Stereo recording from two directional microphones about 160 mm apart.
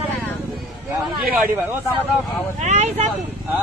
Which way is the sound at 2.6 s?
45° right (ahead or behind).